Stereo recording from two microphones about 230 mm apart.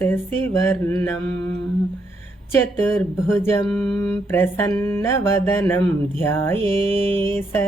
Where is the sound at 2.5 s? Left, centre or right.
Centre.